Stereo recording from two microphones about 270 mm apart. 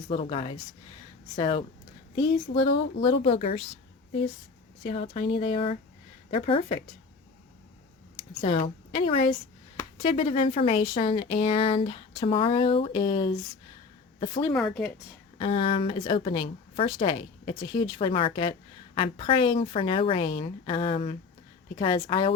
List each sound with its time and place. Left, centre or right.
0.1 s speech: left
3.2 s speech: left
4.8 s speech: left
8.4 s speech: centre
14.5 s speech: centre
15.4 s speech: left